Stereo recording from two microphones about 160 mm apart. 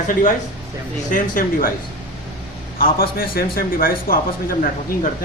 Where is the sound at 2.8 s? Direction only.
65° left (ahead or behind).